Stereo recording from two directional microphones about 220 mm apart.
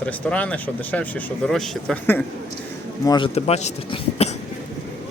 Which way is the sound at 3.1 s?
25° left (ahead or behind).